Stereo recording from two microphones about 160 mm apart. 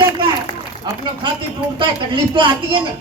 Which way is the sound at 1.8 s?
30° right (ahead or behind).